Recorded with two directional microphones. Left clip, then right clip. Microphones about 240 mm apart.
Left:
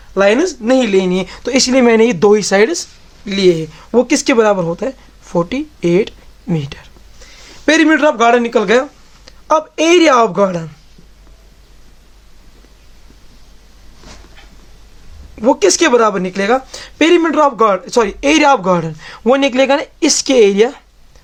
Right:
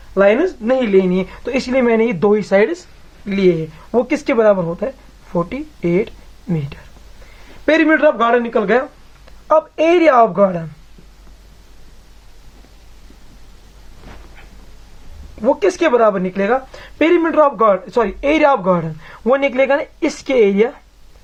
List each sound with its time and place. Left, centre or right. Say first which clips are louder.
0.1 s speech: left 1 dB; left
15.4 s speech: left 4 dB; left